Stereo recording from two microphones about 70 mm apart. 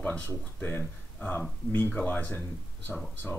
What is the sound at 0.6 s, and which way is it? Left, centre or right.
Speech, left.